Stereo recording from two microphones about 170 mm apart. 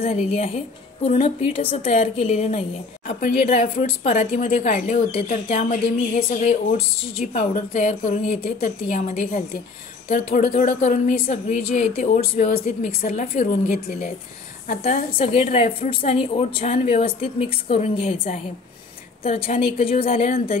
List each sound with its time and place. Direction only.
0.0 s a woman's voice: 35° left (ahead or behind); by 5.4 s 55° left (ahead or behind)
5.5 s a woman's voice: 40° left (ahead or behind); by 13.1 s 60° left (ahead or behind)
13.1 s a woman's voice: 40° left (ahead or behind)
13.5 s a woman's voice: 65° left (ahead or behind)
14.8 s a woman's voice: 50° left (ahead or behind)
15.1 s a woman's voice: 35° left (ahead or behind)
20.2 s a woman's voice: 60° left (ahead or behind)